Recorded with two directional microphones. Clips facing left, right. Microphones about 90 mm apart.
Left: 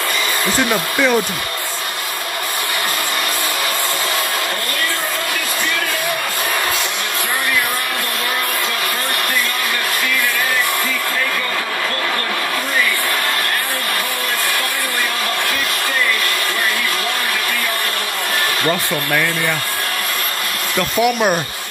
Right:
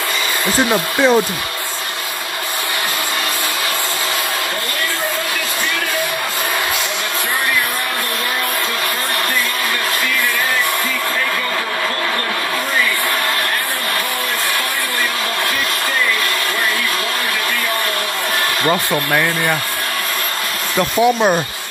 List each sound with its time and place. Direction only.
0.7 s speech: 30° right (ahead or behind)
21.0 s speech: 25° right (ahead or behind)